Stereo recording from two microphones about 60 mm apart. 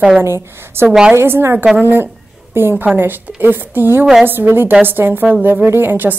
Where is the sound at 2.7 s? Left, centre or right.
Right.